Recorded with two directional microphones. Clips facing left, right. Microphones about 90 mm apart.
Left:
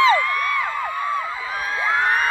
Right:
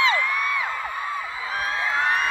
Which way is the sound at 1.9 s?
45° left (ahead or behind).